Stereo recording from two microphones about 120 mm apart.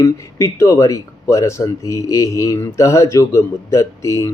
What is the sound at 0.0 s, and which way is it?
Speech, 25° left (ahead or behind).